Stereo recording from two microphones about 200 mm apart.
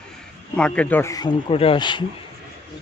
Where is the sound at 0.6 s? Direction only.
5° left (ahead or behind); by 2.0 s 25° left (ahead or behind).